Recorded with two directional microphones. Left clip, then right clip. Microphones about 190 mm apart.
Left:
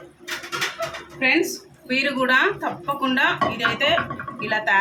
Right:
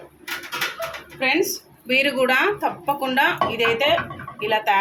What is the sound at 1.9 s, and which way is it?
A woman's voice, 25° right (ahead or behind).